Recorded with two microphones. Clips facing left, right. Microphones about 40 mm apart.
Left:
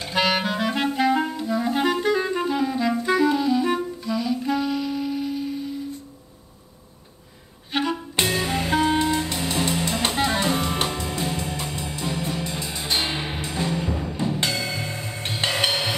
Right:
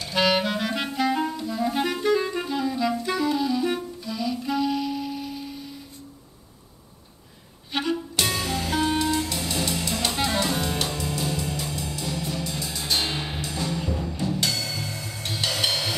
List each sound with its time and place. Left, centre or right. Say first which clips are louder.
0.0 s clarinet: even; centre
4.1 s music: left 3 dB; centre
7.7 s music: left 2 dB; centre